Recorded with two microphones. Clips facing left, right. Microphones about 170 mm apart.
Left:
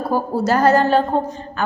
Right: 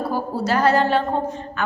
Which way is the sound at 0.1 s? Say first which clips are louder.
Left 7 dB; 45° left (ahead or behind).